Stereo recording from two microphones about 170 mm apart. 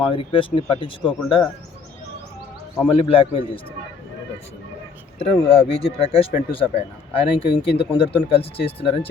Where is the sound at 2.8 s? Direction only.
30° left (ahead or behind).